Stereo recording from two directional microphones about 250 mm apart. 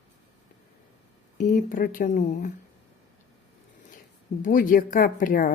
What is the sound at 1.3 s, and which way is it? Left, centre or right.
Speech, left.